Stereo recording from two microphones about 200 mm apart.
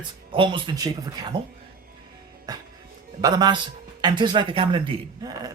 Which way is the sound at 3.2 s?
20° right (ahead or behind).